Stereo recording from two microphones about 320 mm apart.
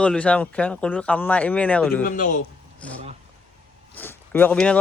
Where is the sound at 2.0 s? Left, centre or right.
Left.